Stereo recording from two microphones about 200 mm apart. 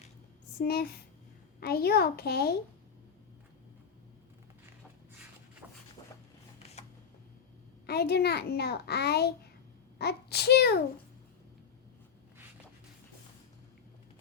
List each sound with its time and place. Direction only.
0.6 s a child's voice: 50° left (ahead or behind)
7.9 s a child's voice: 55° left (ahead or behind)